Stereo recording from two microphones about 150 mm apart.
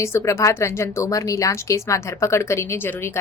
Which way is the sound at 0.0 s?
20° left (ahead or behind).